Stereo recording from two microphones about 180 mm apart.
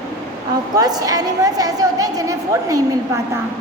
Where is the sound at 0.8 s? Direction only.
20° right (ahead or behind).